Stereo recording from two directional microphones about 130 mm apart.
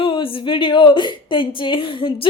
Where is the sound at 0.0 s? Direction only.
40° left (ahead or behind).